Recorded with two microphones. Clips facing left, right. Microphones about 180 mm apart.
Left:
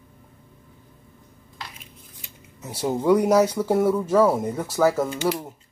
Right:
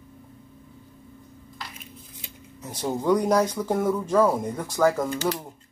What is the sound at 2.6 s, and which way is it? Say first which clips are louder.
Speech: left 3 dB; 10° left (ahead or behind).